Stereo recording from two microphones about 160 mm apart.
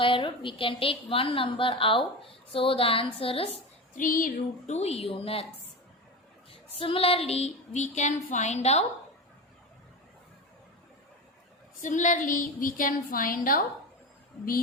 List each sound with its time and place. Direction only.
0.0 s a woman's voice: 30° left (ahead or behind)
3.9 s a woman's voice: 60° left (ahead or behind); by 5.5 s 35° left (ahead or behind)
6.7 s a sound: 35° left (ahead or behind)
11.8 s a woman's voice: 50° left (ahead or behind)